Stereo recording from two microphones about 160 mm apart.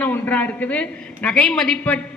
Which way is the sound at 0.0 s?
10° left (ahead or behind).